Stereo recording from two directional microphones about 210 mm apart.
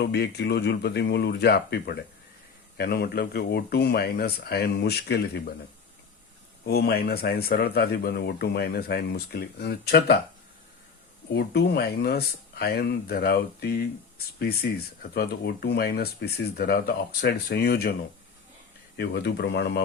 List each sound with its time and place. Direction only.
0.0 s speech: 50° left (ahead or behind)
6.7 s speech: 50° left (ahead or behind)
11.3 s speech: 55° left (ahead or behind)
18.9 s speech: 50° left (ahead or behind)